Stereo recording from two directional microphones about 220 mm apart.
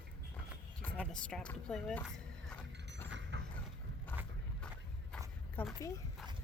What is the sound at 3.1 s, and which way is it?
Mechanisms, 55° right (ahead or behind).